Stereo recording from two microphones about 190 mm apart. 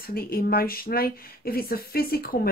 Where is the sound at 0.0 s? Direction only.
50° left (ahead or behind).